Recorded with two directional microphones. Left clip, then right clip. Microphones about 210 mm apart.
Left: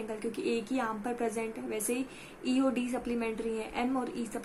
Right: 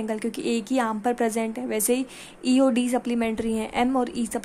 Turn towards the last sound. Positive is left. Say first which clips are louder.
# right 9 dB
turn(degrees=-50)  # may be behind; listen again after turning